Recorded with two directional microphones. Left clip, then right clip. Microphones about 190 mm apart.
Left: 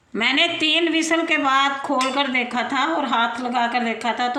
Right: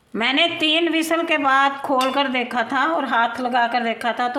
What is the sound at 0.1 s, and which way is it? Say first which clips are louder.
A woman's voice: even; 35° right (ahead or behind).